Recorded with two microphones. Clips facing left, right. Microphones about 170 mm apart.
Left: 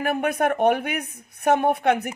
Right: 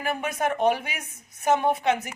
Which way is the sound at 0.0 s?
60° left (ahead or behind).